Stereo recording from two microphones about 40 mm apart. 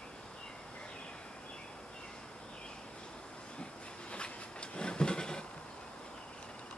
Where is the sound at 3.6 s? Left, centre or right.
Left.